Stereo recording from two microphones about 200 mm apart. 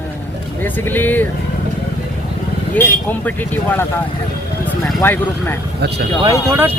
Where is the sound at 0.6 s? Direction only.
10° left (ahead or behind).